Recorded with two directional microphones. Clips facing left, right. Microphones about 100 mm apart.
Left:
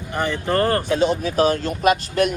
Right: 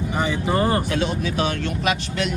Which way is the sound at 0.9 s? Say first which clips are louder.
Left 4 dB; 30° left (ahead or behind).